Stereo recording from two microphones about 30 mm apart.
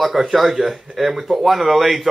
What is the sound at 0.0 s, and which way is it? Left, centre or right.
Speech, centre.